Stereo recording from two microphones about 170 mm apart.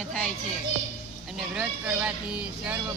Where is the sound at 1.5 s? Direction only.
5° right (ahead or behind).